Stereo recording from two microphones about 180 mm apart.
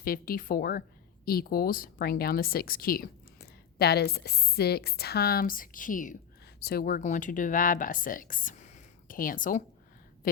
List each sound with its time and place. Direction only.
0.0 s a woman's voice: 55° left (ahead or behind)
6.6 s speech: 60° left (ahead or behind)